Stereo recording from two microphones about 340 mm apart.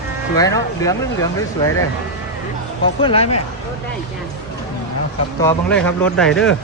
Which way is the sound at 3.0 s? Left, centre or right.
Centre.